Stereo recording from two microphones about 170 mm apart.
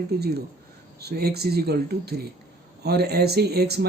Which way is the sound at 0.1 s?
70° right (ahead or behind).